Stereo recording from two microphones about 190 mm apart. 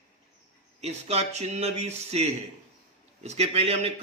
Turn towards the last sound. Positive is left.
turn(degrees=-30)  # may be behind; listen again after turning